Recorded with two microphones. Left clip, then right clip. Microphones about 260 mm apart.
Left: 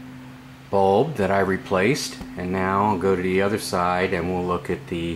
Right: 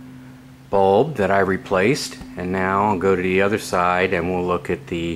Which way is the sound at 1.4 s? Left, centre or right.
Centre.